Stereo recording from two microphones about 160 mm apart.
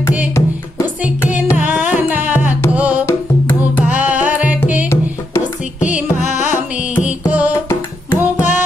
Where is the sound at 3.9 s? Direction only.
10° right (ahead or behind).